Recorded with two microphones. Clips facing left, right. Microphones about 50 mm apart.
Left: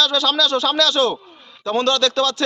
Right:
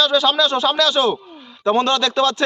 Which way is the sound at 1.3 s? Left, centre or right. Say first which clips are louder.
Right 5 dB; centre.